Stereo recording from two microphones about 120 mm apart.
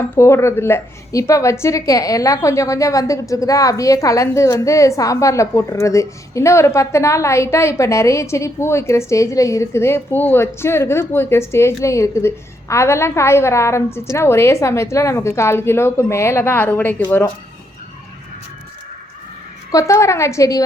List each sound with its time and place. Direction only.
0.2 s a woman's voice: 25° left (ahead or behind)
19.7 s a woman's voice: 25° left (ahead or behind)